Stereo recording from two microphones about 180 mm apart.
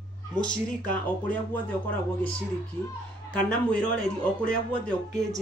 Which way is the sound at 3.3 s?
5° left (ahead or behind).